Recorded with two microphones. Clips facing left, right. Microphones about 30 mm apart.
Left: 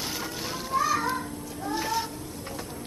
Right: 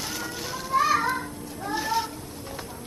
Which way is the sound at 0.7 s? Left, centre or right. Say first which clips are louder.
Right 3 dB; right.